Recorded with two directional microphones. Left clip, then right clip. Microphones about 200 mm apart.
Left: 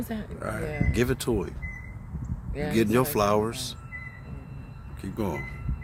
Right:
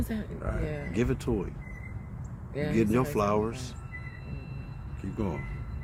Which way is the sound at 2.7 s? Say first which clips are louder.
Left 4 dB; 40° left (ahead or behind).